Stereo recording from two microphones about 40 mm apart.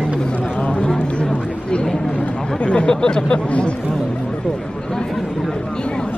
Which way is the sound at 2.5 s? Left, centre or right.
Left.